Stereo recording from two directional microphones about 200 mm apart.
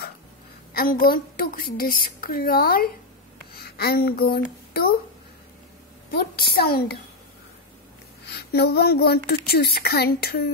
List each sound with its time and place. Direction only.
0.7 s speech: 50° left (ahead or behind)
6.1 s speech: 50° left (ahead or behind)
8.3 s speech: 55° left (ahead or behind)